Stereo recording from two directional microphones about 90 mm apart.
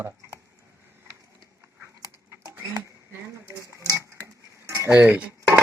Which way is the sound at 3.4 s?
35° right (ahead or behind).